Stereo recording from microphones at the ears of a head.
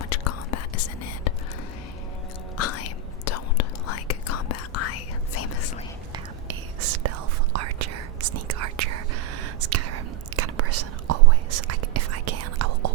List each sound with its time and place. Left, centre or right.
0.0 s whispering: left
2.6 s whispering: left
6.5 s whispering: right